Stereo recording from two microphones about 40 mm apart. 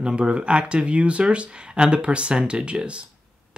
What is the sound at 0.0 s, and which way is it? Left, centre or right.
Speech, right.